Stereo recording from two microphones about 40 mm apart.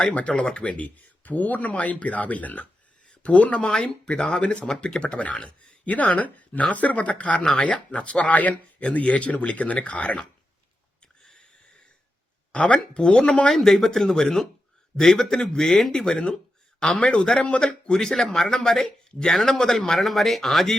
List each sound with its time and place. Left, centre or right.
0.1 s speech: left
11.2 s a sound: centre
12.5 s speech: left
13.5 s speech: centre
17.0 s speech: left; by 20.7 s centre